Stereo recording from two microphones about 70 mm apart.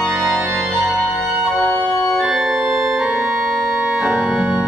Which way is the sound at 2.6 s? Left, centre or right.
Right.